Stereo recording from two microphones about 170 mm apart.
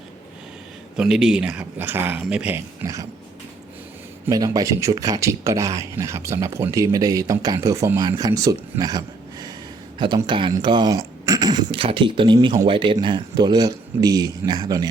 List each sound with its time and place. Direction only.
0.9 s speech: 5° right (ahead or behind)
2.8 s speech: 20° right (ahead or behind)
4.3 s speech: 20° right (ahead or behind)